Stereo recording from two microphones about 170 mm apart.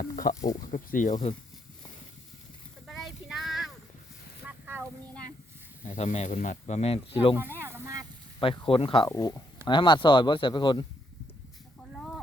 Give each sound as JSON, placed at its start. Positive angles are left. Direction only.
{"t": 0.0, "sound": "a sound", "side_deg": 55}
{"t": 0.7, "sound": "speech", "side_deg": 50}
{"t": 2.8, "sound": "child singing", "side_deg": 0}
{"t": 4.6, "sound": "a sound", "side_deg": -15}
{"t": 5.9, "sound": "speech", "side_deg": 40}
{"t": 7.6, "sound": "sizzle", "side_deg": -15}
{"t": 8.4, "sound": "speech", "side_deg": 30}
{"t": 9.0, "sound": "speech", "side_deg": 20}